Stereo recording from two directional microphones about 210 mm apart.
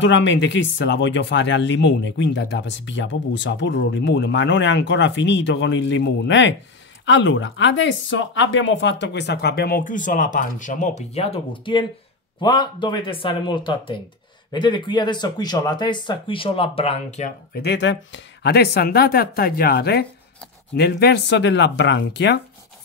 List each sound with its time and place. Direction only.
0.0 s speech: 60° left (ahead or behind); by 17.3 s 30° left (ahead or behind)
17.6 s speech: 55° left (ahead or behind)